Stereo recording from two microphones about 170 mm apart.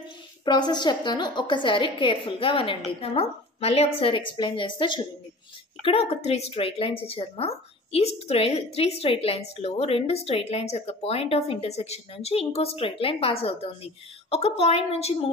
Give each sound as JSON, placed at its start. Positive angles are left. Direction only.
{"t": 0.5, "sound": "a woman's voice", "side_deg": 25}